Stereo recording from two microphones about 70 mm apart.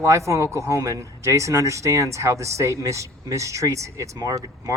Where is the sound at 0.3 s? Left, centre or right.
Right.